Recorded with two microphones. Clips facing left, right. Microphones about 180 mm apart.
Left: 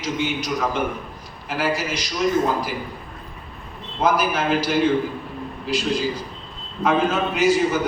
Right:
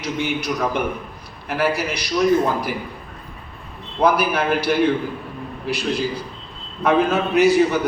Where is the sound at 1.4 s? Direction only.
65° right (ahead or behind).